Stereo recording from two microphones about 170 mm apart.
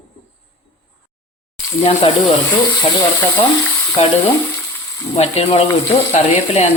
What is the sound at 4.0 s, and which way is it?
Speech, 40° left (ahead or behind).